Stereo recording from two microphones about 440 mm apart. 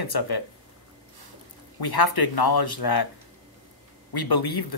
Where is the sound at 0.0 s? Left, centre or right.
Left.